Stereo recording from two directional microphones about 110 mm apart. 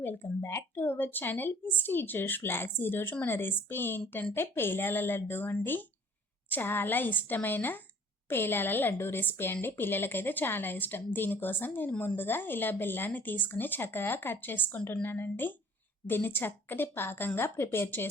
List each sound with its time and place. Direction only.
0.0 s a woman's voice: 20° left (ahead or behind)